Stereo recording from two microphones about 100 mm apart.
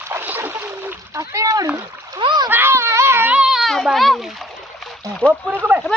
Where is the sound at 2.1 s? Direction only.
50° right (ahead or behind).